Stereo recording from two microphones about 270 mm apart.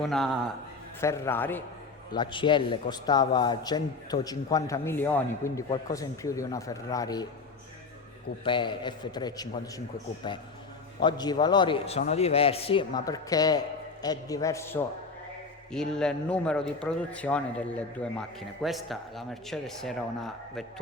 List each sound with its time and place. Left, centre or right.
0.0 s a man's voice: centre
8.4 s a man's voice: centre